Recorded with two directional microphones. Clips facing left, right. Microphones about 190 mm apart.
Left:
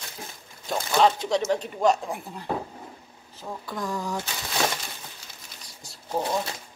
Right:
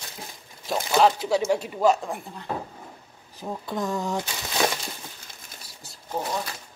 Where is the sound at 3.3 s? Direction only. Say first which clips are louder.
Right 4 dB; 20° right (ahead or behind).